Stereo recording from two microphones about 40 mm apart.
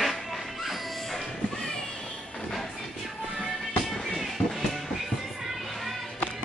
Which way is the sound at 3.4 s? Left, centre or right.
Centre.